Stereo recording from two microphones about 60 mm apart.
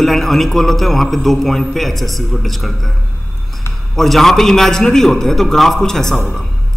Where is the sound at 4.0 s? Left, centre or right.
Centre.